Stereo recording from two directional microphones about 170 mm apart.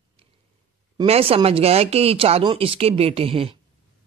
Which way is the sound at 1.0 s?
35° right (ahead or behind).